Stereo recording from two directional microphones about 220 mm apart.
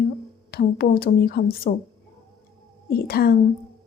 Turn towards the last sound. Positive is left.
turn(degrees=45)  # may be behind; listen again after turning